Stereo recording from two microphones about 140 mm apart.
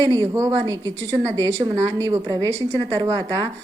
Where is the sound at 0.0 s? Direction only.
25° right (ahead or behind).